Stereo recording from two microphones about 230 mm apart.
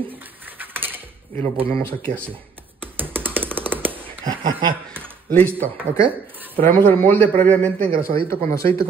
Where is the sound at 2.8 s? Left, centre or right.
Centre.